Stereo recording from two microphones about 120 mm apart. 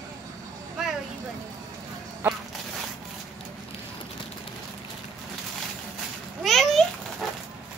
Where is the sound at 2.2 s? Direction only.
15° right (ahead or behind).